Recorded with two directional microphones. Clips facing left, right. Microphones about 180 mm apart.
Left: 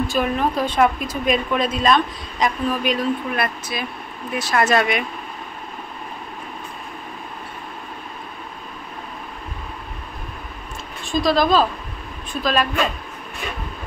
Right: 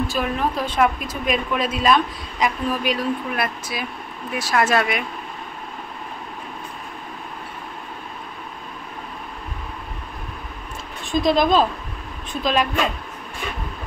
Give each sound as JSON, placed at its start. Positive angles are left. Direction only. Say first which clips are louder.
{"t": 0.1, "sound": "speech", "louder": "left 2 dB", "side_deg": 0}
{"t": 11.1, "sound": "speech", "louder": "even", "side_deg": -20}